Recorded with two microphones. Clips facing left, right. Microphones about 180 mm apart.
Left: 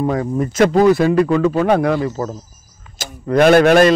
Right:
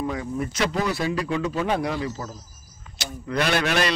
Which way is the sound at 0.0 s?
50° left (ahead or behind).